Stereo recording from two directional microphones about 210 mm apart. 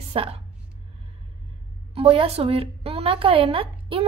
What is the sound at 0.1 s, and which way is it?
Speech, 30° right (ahead or behind).